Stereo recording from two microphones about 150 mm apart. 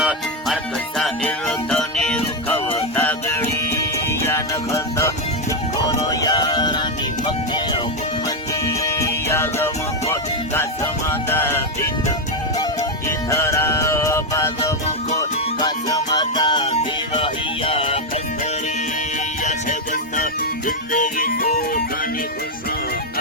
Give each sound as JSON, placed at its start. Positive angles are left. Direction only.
{"t": 0.0, "sound": "music", "side_deg": -5}
{"t": 8.6, "sound": "music", "side_deg": 20}
{"t": 13.1, "sound": "music", "side_deg": 20}
{"t": 19.5, "sound": "music", "side_deg": 60}